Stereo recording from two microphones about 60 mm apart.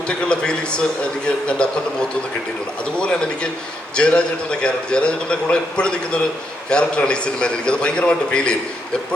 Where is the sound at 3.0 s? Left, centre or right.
Centre.